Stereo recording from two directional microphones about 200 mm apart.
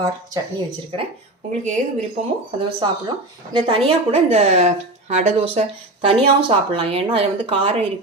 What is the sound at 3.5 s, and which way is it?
Speech, 25° right (ahead or behind).